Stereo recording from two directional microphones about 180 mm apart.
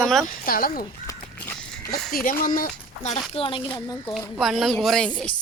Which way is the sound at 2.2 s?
50° left (ahead or behind).